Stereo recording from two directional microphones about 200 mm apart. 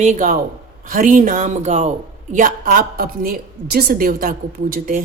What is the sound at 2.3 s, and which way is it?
A woman's voice, 45° right (ahead or behind).